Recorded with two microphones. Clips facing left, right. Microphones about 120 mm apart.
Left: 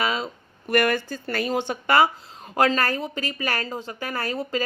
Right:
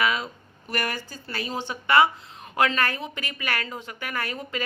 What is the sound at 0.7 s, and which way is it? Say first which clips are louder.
Speech: left 9 dB; 60° left (ahead or behind).